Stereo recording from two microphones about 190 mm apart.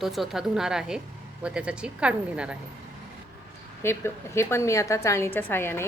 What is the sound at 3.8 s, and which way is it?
A woman's voice, 15° left (ahead or behind).